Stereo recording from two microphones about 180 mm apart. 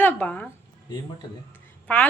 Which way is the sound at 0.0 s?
10° left (ahead or behind).